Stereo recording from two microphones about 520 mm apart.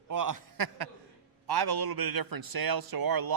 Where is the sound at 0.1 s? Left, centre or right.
Right.